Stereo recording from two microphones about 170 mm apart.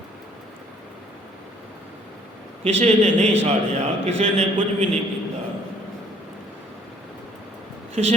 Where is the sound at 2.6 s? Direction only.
40° right (ahead or behind).